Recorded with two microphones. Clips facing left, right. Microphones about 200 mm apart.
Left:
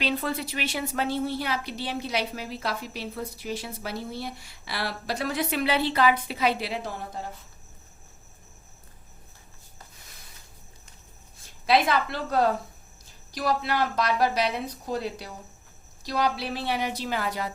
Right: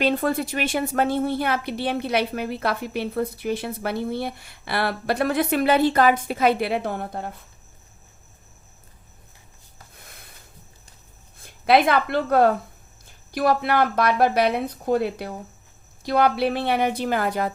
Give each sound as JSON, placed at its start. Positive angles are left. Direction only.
{"t": 0.0, "sound": "a woman's voice", "side_deg": -50}
{"t": 9.9, "sound": "a sound", "side_deg": -55}
{"t": 11.4, "sound": "a woman's voice", "side_deg": -55}